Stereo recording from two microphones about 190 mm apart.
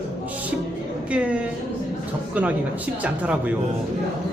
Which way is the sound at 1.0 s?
5° right (ahead or behind).